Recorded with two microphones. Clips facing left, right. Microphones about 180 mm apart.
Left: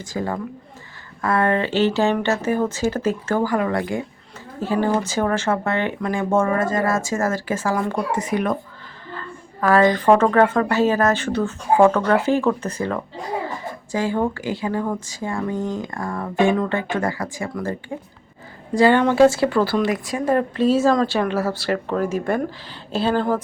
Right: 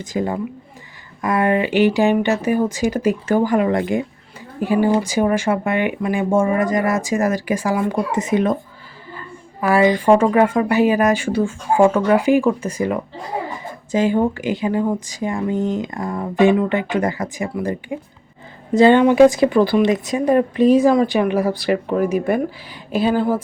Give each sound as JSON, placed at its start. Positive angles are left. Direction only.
{"t": 0.0, "sound": "speech", "side_deg": -20}
{"t": 9.1, "sound": "speech", "side_deg": -10}